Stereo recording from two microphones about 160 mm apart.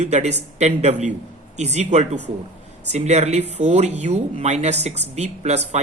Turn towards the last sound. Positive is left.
turn(degrees=-45)  # may be behind; listen again after turning